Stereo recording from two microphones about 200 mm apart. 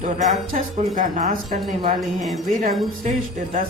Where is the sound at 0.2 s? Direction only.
40° right (ahead or behind).